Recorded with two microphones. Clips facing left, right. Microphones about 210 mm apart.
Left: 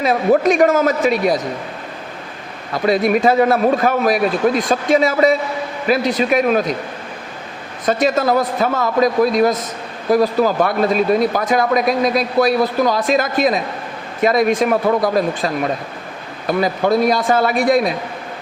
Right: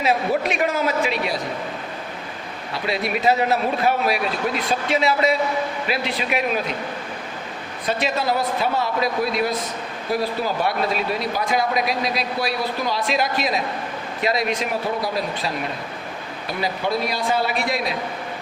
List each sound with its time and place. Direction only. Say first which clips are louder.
0.0 s speech: left 7 dB; 45° left (ahead or behind)
2.7 s speech: left 9 dB; 45° left (ahead or behind)
7.9 s speech: left 7 dB; 45° left (ahead or behind)